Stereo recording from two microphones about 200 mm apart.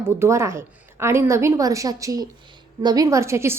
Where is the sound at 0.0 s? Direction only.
10° right (ahead or behind).